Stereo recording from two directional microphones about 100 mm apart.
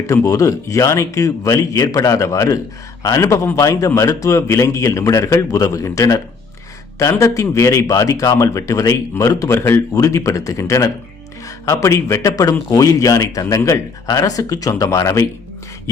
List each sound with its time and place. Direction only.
0.1 s a man's voice: 30° left (ahead or behind)